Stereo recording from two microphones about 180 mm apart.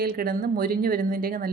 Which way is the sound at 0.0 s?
55° right (ahead or behind).